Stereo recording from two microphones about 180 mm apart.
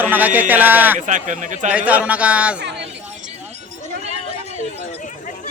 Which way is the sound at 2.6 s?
75° right (ahead or behind).